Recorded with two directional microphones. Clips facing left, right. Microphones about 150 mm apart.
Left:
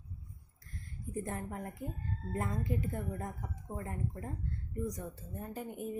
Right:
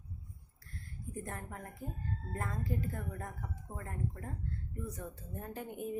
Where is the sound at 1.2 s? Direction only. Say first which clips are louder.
Left 6 dB; 20° left (ahead or behind).